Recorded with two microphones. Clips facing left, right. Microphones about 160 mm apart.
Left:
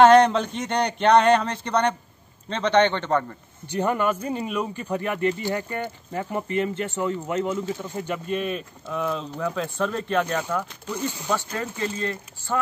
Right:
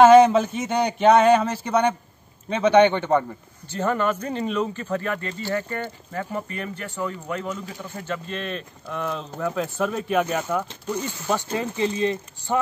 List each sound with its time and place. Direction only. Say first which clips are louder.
0.0 s speech: right 2 dB; 5° right (ahead or behind)
3.6 s speech: even; 15° left (ahead or behind); by 12.5 s 15° right (ahead or behind)